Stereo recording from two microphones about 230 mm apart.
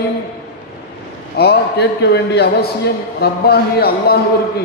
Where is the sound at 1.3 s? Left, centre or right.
Left.